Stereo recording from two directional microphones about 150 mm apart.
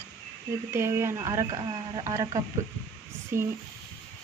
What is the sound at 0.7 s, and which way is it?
Speech, 20° right (ahead or behind).